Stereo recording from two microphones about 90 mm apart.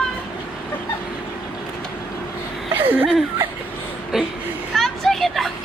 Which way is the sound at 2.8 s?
20° right (ahead or behind).